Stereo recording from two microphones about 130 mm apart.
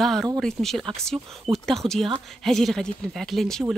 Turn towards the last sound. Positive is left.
turn(degrees=0)  # may be behind; listen again after turning